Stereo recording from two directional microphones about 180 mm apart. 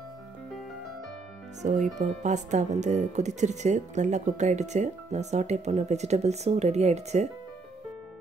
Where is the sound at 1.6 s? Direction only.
45° right (ahead or behind).